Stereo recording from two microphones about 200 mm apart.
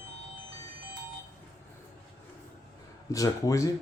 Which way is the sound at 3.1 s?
15° left (ahead or behind).